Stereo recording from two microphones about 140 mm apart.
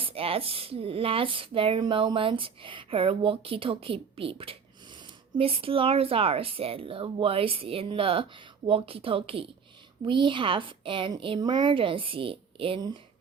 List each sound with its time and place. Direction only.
0.0 s speech: 40° right (ahead or behind)